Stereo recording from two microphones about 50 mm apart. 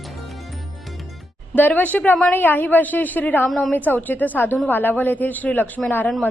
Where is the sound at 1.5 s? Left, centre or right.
Left.